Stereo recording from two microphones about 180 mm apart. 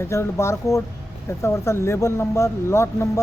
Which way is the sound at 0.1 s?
15° left (ahead or behind).